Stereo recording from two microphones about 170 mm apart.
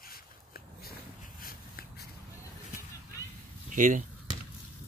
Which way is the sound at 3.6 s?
50° right (ahead or behind).